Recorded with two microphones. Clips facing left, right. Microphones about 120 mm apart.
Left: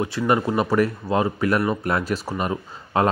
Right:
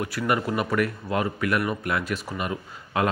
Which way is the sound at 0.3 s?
30° left (ahead or behind).